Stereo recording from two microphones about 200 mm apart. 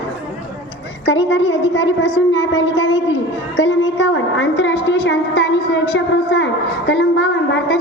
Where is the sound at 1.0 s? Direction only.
60° left (ahead or behind).